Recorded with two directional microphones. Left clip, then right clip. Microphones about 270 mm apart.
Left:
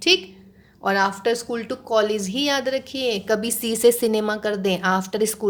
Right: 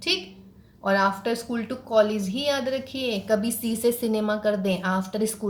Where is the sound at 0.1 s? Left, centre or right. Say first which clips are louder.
Left 8 dB; left.